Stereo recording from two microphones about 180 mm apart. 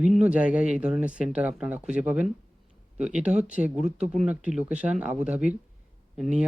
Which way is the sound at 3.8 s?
40° right (ahead or behind).